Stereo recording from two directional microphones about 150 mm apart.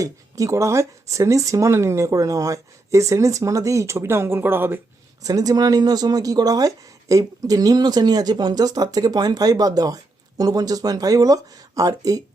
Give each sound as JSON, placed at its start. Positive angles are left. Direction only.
{"t": 0.0, "sound": "speech", "side_deg": -20}